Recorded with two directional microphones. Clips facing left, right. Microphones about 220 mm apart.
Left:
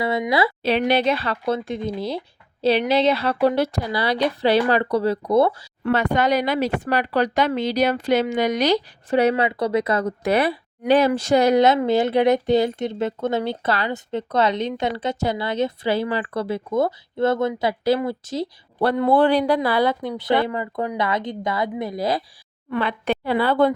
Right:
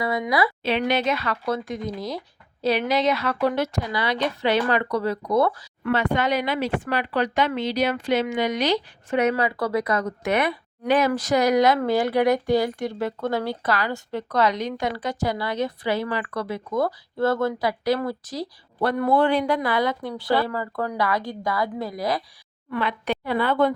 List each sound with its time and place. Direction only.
0.0 s speech: 25° left (ahead or behind)
5.9 s speech: 40° left (ahead or behind)